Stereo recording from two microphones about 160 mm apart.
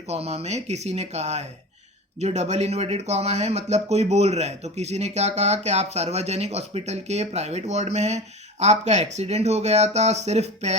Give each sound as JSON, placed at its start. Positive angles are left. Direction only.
{"t": 0.1, "sound": "speech", "side_deg": -40}